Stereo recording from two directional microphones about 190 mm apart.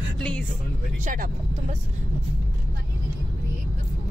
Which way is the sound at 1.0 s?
45° right (ahead or behind).